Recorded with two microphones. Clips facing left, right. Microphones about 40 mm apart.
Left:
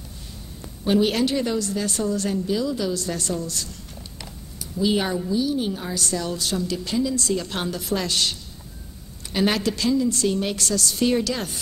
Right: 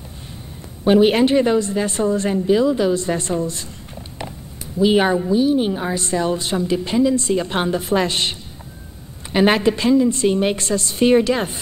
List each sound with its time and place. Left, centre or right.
0.8 s a woman's voice: right
4.7 s a woman's voice: right